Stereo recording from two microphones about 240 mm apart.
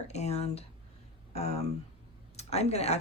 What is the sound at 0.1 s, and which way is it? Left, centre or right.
Speech, left.